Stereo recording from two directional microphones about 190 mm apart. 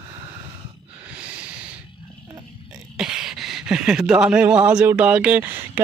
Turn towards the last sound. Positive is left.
turn(degrees=-10)  # may be behind; listen again after turning